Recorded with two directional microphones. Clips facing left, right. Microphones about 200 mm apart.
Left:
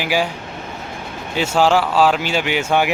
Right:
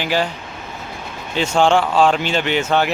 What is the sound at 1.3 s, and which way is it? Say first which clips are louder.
Speech: even; 5° left (ahead or behind).